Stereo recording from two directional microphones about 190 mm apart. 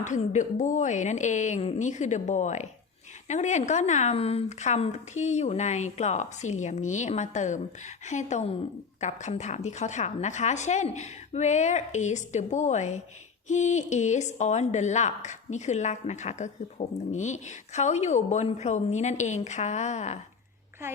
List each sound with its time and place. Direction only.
0.0 s a woman's voice: 40° left (ahead or behind)